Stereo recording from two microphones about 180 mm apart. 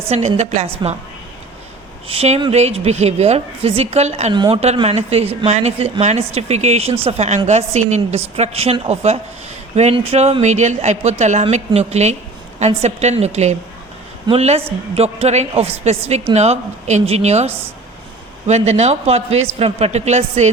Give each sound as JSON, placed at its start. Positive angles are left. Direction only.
{"t": 0.1, "sound": "speech", "side_deg": -35}
{"t": 2.0, "sound": "speech", "side_deg": -35}
{"t": 4.4, "sound": "a woman's voice", "side_deg": -25}
{"t": 4.6, "sound": "speech", "side_deg": -35}